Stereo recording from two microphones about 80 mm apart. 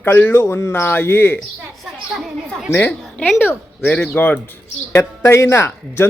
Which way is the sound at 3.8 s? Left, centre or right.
Centre.